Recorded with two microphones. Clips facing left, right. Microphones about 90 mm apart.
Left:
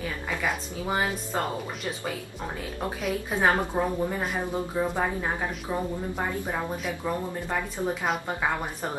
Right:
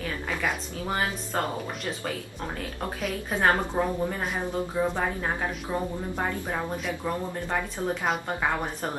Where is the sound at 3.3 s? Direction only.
Centre (ahead or behind).